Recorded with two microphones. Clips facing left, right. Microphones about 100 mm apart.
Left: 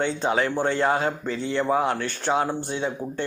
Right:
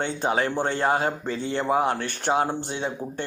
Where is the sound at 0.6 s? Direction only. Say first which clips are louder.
Left 1 dB; 50° right (ahead or behind).